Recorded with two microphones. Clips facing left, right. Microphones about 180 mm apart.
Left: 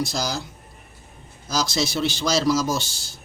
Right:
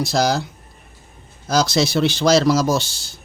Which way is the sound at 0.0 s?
65° right (ahead or behind).